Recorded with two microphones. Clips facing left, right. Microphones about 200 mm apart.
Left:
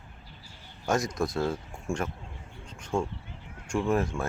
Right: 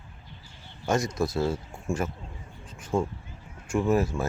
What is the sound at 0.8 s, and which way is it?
Speech, centre (ahead or behind).